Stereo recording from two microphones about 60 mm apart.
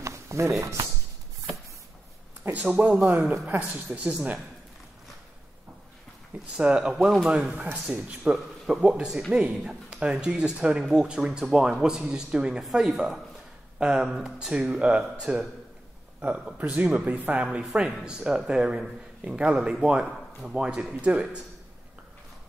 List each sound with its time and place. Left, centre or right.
0.0 s a sound: right
2.4 s speech: right
6.5 s speech: centre
7.5 s speech: right
7.8 s speech: centre
16.5 s speech: right
18.0 s speech: centre
20.1 s speech: centre
20.5 s speech: centre